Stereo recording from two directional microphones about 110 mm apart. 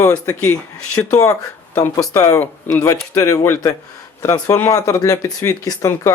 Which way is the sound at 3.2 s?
25° left (ahead or behind).